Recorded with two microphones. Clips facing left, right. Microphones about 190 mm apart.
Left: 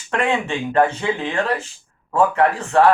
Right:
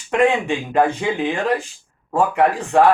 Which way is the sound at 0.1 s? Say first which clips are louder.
Right 4 dB; 15° right (ahead or behind).